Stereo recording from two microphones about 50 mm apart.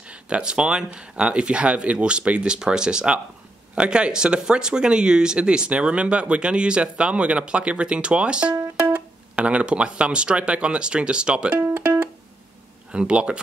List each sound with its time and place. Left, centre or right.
0.1 s speech: right
11.5 s music: right
12.9 s speech: right